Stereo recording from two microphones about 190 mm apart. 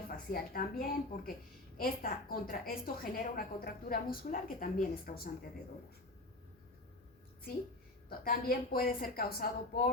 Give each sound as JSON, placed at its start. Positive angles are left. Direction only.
{"t": 0.3, "sound": "a woman's voice", "side_deg": 50}
{"t": 8.2, "sound": "a woman's voice", "side_deg": 50}